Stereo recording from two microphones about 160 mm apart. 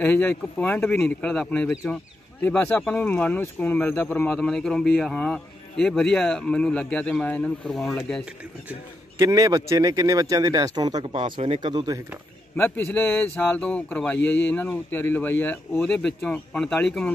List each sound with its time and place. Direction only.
0.0 s speech: 10° left (ahead or behind)
9.2 s speech: 20° right (ahead or behind)
12.5 s speech: 15° left (ahead or behind)